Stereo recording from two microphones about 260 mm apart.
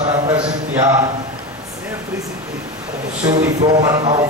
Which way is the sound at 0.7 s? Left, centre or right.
Centre.